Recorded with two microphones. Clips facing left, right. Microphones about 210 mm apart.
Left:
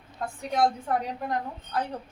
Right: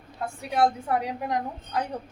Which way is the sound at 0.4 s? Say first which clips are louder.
Right 1 dB; 10° right (ahead or behind).